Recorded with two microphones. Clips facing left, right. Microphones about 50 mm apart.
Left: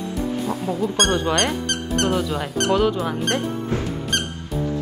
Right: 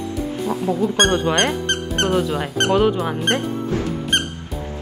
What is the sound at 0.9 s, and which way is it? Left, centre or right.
Speech, right.